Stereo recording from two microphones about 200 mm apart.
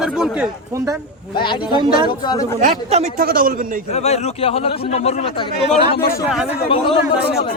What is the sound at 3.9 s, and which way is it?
Speech, 30° left (ahead or behind).